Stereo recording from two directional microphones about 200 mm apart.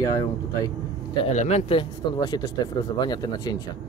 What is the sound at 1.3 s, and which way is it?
A man's voice, 35° left (ahead or behind).